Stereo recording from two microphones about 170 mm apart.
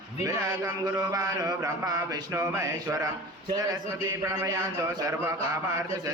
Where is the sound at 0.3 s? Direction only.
20° right (ahead or behind).